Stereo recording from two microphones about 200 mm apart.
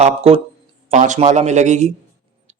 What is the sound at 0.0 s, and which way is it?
A man's voice, 30° right (ahead or behind).